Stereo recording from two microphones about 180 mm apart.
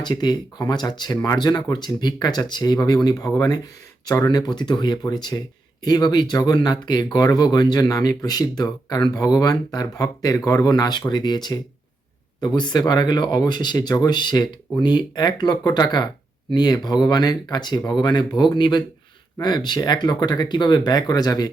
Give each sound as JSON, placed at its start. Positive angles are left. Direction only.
{"t": 0.0, "sound": "speech", "side_deg": 25}